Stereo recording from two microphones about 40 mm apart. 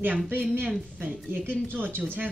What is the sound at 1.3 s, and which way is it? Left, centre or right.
Speech, right.